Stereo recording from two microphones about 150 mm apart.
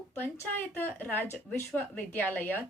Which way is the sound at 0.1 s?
15° left (ahead or behind).